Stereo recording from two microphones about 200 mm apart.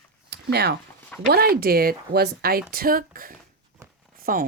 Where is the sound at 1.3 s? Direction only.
50° right (ahead or behind).